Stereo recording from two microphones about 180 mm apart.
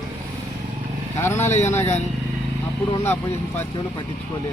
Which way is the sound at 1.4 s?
40° left (ahead or behind).